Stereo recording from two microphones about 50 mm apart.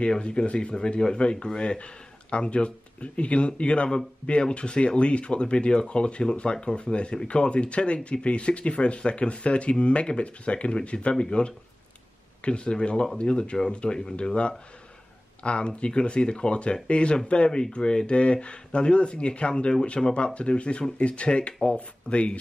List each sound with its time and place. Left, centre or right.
0.0 s speech: centre
20.3 s speech: left